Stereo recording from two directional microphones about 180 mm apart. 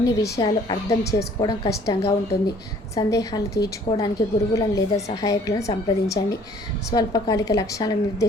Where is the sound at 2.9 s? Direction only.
20° left (ahead or behind).